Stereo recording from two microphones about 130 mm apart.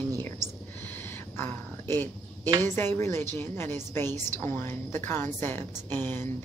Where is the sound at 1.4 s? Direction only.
15° left (ahead or behind).